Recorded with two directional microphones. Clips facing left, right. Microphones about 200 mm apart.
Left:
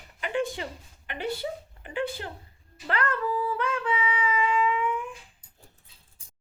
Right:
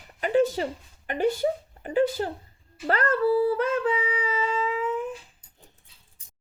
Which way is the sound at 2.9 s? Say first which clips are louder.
Right 6 dB; 40° right (ahead or behind).